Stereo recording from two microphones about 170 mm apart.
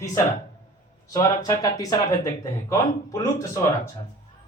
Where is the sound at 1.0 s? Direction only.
20° left (ahead or behind).